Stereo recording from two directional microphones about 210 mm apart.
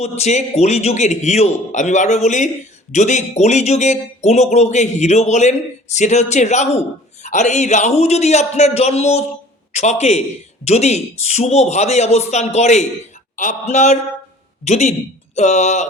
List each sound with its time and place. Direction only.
0.0 s speech: 30° left (ahead or behind)